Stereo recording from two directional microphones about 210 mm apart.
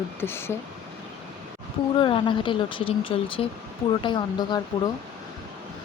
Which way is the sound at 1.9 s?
25° left (ahead or behind).